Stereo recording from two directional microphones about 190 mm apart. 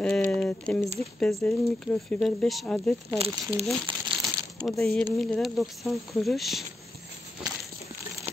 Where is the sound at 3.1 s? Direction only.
30° right (ahead or behind).